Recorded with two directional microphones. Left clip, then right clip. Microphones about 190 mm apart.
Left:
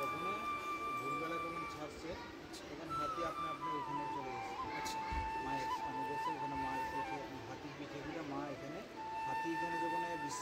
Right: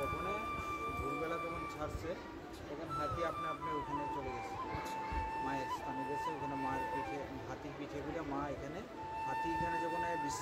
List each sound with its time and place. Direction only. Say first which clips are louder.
6.2 s speech: even; centre (ahead or behind)
9.3 s speech: right 3 dB; centre (ahead or behind)